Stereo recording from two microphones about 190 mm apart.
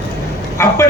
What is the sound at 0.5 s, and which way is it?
Speech, 15° left (ahead or behind).